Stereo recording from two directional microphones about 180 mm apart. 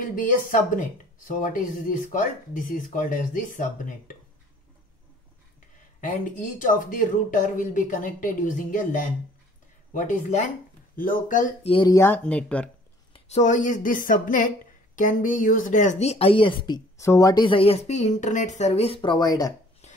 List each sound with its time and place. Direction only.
0.0 s speech: 50° left (ahead or behind)
6.6 s speech: 45° left (ahead or behind)
11.6 s speech: 30° left (ahead or behind)
11.9 s speech: 15° left (ahead or behind)
13.1 s speech: 40° left (ahead or behind); by 19.5 s 20° left (ahead or behind)